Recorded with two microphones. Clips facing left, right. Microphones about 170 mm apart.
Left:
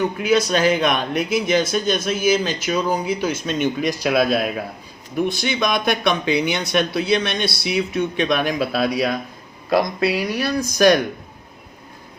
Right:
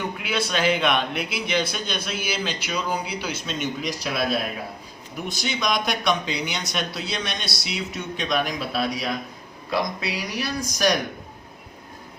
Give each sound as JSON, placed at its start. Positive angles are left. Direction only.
{"t": 0.2, "sound": "speech", "side_deg": 40}
{"t": 5.3, "sound": "speech", "side_deg": 60}